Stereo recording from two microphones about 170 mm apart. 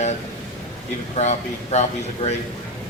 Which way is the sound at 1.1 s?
40° left (ahead or behind).